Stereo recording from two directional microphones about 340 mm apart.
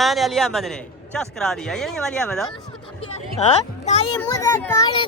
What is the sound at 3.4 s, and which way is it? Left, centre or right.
A child's voice, centre.